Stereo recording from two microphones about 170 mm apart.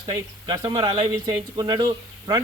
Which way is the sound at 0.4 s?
25° right (ahead or behind).